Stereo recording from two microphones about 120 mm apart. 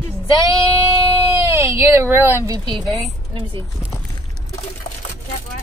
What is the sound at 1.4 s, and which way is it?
Speech, 25° right (ahead or behind).